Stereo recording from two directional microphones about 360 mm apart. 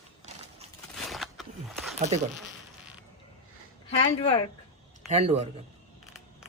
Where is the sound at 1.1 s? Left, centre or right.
Centre.